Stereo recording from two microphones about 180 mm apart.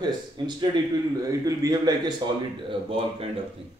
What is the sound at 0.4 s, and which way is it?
A man's voice, 25° right (ahead or behind).